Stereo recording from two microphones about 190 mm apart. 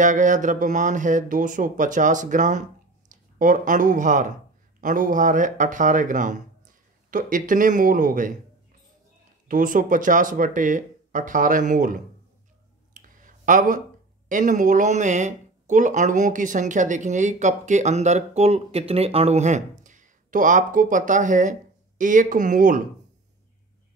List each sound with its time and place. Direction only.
0.0 s speech: 40° right (ahead or behind)
9.5 s speech: 45° right (ahead or behind)
12.9 s a sound: 45° right (ahead or behind)
14.3 s speech: 40° right (ahead or behind)